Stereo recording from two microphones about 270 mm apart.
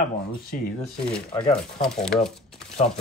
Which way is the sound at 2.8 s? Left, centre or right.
Left.